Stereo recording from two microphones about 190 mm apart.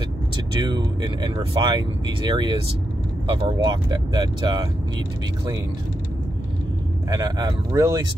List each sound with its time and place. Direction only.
0.6 s speech: 20° right (ahead or behind)
7.1 s speech: 20° right (ahead or behind)